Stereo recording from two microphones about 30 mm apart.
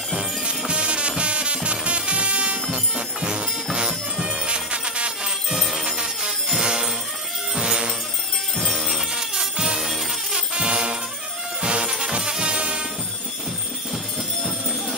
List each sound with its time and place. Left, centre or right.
0.1 s music: right
8.7 s music: centre
9.1 s music: centre
10.5 s music: right